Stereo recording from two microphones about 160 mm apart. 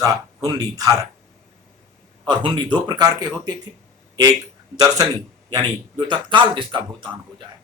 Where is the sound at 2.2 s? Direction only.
30° right (ahead or behind).